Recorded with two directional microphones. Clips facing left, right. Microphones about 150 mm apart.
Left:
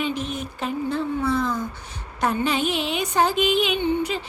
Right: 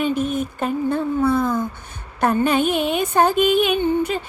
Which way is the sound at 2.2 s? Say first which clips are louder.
Right 5 dB; 50° right (ahead or behind).